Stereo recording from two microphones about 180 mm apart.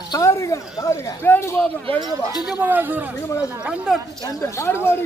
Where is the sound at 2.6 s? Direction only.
10° right (ahead or behind).